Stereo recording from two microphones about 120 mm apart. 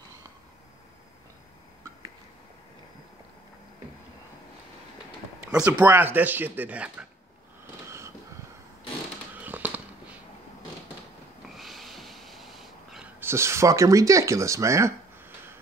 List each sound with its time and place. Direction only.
5.7 s speech: 15° right (ahead or behind)
9.3 s a sound: 15° right (ahead or behind)
11.5 s snort: centre (ahead or behind)
13.2 s speech: 20° right (ahead or behind)